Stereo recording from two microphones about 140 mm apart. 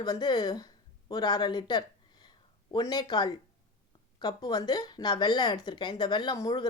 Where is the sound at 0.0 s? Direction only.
30° left (ahead or behind).